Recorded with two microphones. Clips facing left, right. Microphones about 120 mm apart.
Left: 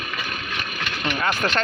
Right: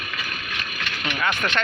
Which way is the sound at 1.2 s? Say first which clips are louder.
Left 1 dB; 35° left (ahead or behind).